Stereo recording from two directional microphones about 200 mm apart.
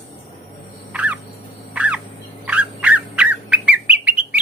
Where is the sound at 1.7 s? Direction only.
5° right (ahead or behind).